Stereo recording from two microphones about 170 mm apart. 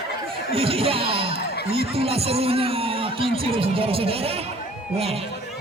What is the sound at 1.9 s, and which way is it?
Speech, 35° right (ahead or behind).